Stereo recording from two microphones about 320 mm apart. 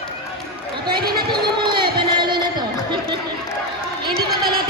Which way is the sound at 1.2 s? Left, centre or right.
Centre.